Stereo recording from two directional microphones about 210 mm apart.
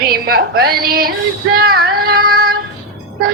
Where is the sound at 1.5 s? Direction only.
45° right (ahead or behind).